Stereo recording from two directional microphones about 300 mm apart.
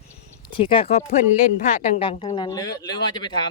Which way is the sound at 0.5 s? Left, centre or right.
Centre.